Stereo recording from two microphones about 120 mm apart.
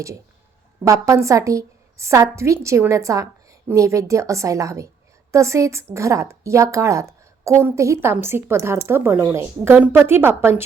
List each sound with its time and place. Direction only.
0.9 s a woman's voice: 25° right (ahead or behind)